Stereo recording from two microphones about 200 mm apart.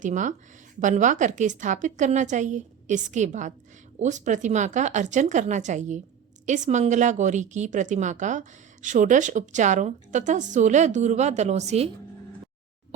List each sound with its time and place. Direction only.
0.0 s speech: 40° right (ahead or behind)